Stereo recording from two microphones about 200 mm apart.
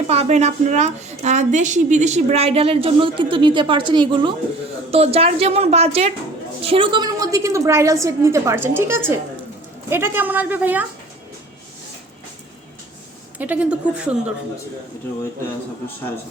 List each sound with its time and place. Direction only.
0.1 s a woman's voice: 35° right (ahead or behind); by 10.8 s 10° right (ahead or behind)
13.4 s a woman's voice: 5° right (ahead or behind)